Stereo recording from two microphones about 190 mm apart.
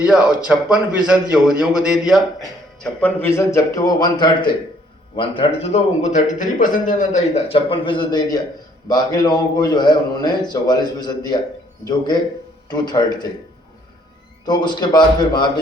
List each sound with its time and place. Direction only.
0.0 s a man's voice: 5° right (ahead or behind)
2.8 s a man's voice: 10° left (ahead or behind)
14.4 s a man's voice: 20° left (ahead or behind)